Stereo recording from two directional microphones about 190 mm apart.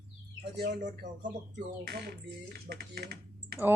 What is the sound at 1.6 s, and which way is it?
Speech, 55° right (ahead or behind).